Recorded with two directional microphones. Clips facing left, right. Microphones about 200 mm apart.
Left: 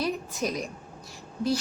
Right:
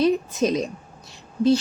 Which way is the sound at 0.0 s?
20° right (ahead or behind).